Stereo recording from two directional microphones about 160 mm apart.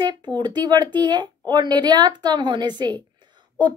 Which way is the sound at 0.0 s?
30° right (ahead or behind).